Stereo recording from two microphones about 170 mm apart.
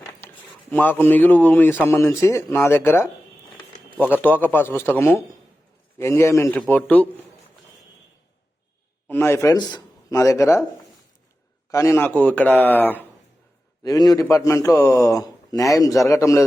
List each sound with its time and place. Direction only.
0.7 s speech: 10° left (ahead or behind)
9.0 s speech: 15° left (ahead or behind)
11.7 s speech: 15° left (ahead or behind)
13.8 s a man's voice: 20° left (ahead or behind)